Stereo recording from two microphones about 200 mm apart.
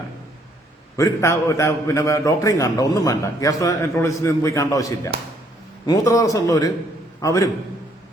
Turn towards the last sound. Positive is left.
turn(degrees=15)  # may be behind; listen again after turning